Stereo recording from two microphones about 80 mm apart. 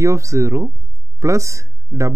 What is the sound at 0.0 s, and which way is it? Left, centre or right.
Speech, right.